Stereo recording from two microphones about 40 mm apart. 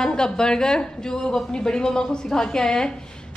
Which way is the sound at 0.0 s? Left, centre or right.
Centre.